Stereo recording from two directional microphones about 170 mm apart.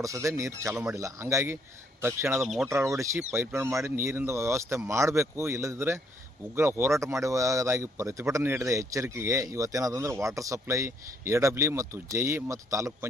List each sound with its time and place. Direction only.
0.0 s speech: 20° right (ahead or behind)
2.4 s speech: centre (ahead or behind)
2.6 s speech: 15° right (ahead or behind)